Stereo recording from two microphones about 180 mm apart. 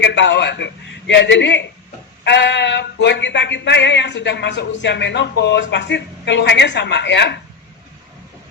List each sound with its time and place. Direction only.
0.0 s speech: 75° left (ahead or behind)